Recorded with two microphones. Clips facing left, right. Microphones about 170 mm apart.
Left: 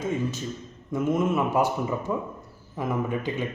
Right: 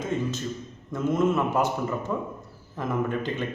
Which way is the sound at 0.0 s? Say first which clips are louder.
Even; 10° left (ahead or behind).